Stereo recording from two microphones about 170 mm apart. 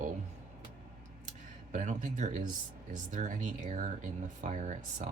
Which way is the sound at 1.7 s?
50° right (ahead or behind).